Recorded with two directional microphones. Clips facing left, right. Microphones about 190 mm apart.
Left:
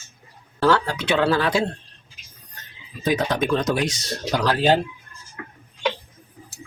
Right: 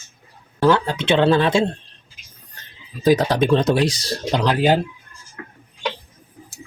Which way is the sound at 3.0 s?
35° right (ahead or behind).